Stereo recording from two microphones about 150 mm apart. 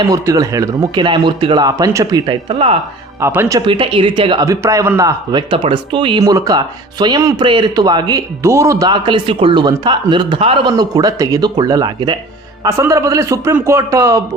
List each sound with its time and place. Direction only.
0.1 s speech: 25° right (ahead or behind)
2.2 s speech: 35° right (ahead or behind)
3.2 s speech: 20° right (ahead or behind)
3.7 s speech: 35° right (ahead or behind)
4.4 s speech: 20° right (ahead or behind)